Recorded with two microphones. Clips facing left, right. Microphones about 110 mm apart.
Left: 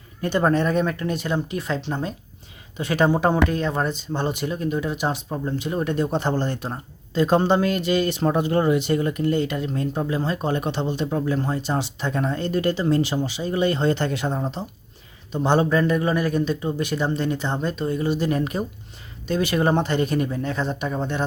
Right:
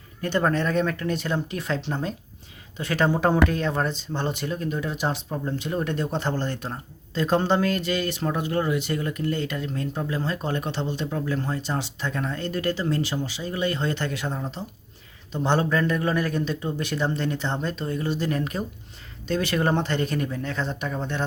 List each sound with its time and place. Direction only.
0.2 s speech: 15° left (ahead or behind)
2.7 s speech: 15° left (ahead or behind)
15.3 s speech: 15° left (ahead or behind)